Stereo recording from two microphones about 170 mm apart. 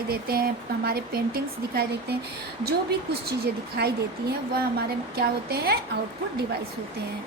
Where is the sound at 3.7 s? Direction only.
70° right (ahead or behind).